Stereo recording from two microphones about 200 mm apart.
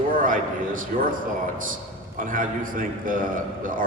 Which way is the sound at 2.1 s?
40° right (ahead or behind).